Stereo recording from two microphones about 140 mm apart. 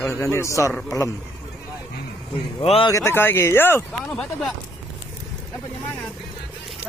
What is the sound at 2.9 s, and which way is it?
Speech, 20° left (ahead or behind).